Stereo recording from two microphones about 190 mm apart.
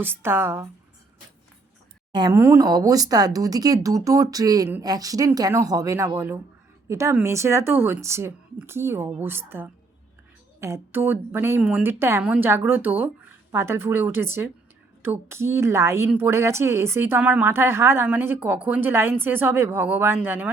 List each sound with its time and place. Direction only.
0.0 s a woman's voice: 10° right (ahead or behind)
2.1 s a woman's voice: 20° right (ahead or behind)